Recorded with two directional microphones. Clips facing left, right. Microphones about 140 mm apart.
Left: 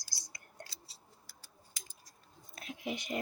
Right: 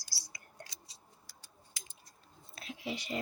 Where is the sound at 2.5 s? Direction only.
55° left (ahead or behind).